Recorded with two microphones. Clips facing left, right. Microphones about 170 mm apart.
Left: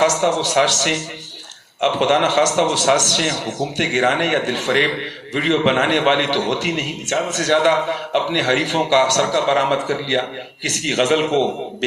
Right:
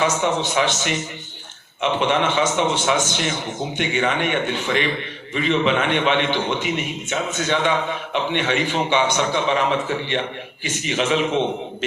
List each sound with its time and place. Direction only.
0.0 s a man's voice: 90° left